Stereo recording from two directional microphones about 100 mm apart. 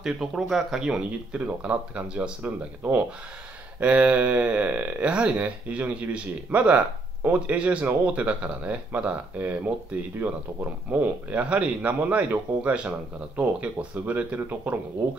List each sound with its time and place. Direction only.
0.0 s speech: centre (ahead or behind)